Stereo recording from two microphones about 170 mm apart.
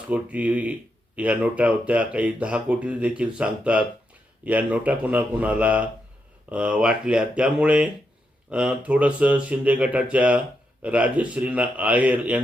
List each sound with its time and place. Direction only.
0.1 s speech: 10° right (ahead or behind)